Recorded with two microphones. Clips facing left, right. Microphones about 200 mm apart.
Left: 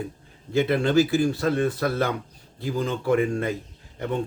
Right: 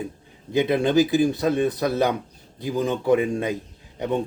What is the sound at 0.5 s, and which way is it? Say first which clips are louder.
A man's voice: right 1 dB; 20° right (ahead or behind).